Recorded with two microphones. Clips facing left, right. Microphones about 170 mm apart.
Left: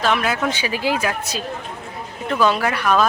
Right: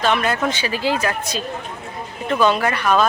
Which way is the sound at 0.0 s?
Centre (ahead or behind).